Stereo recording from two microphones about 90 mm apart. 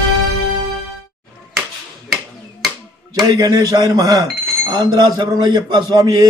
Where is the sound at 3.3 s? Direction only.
40° right (ahead or behind).